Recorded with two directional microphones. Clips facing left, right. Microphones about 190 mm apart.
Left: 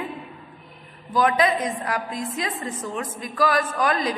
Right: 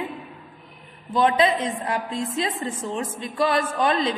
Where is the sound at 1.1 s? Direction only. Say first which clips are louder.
Right 1 dB; 25° right (ahead or behind).